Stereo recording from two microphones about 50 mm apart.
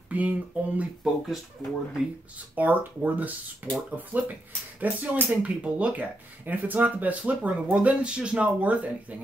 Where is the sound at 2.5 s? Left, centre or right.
Right.